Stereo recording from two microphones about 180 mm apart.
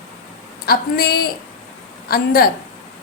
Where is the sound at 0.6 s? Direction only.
55° left (ahead or behind).